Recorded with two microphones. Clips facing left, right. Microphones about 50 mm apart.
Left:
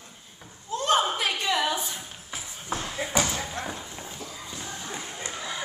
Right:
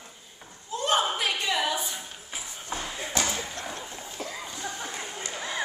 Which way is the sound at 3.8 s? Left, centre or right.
Centre.